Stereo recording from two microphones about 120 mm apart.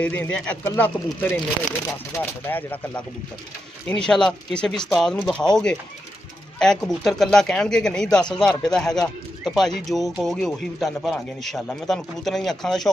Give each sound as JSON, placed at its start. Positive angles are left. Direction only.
{"t": 0.0, "sound": "speech", "side_deg": 10}